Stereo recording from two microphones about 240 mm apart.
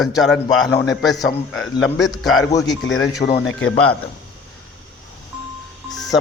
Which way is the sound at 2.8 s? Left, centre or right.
Left.